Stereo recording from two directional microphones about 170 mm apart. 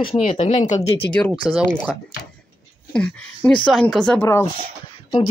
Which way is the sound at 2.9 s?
5° left (ahead or behind).